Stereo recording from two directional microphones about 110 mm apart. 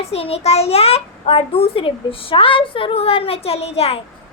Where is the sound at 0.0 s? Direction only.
65° left (ahead or behind).